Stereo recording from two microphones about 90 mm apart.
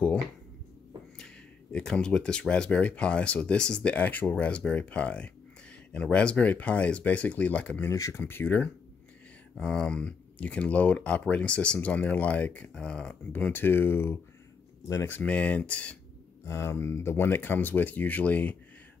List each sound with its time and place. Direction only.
1.1 s speech: 5° left (ahead or behind)
7.8 s speech: 30° left (ahead or behind)
9.6 s speech: 5° left (ahead or behind); by 15.0 s 35° left (ahead or behind)
15.0 s speech: 20° left (ahead or behind)
16.4 s speech: 30° left (ahead or behind)